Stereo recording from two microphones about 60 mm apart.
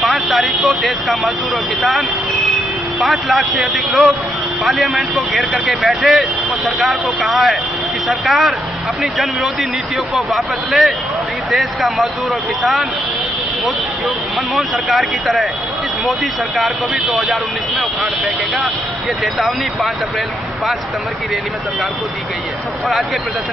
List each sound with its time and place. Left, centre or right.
0.0 s vehicle: centre
0.7 s speech: centre
14.5 s speech: centre